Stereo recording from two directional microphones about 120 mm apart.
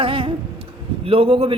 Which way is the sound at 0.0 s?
45° right (ahead or behind).